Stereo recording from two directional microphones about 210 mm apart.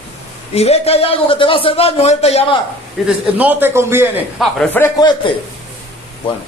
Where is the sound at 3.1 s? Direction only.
5° right (ahead or behind).